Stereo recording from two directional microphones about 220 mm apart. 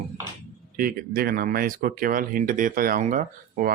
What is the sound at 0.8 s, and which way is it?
Speech, 40° right (ahead or behind).